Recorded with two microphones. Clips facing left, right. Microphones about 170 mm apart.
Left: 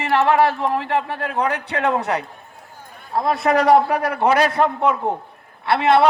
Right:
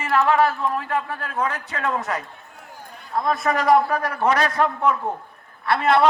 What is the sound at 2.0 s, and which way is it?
Speech, 70° left (ahead or behind).